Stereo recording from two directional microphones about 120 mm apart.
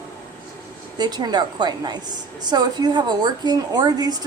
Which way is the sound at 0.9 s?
35° right (ahead or behind).